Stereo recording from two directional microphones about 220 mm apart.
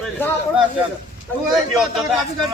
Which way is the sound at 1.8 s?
Centre (ahead or behind).